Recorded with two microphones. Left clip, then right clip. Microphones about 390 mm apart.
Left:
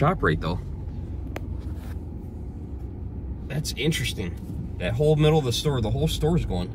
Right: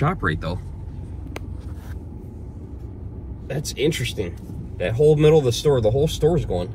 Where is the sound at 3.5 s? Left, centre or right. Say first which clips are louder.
Right 5 dB; centre.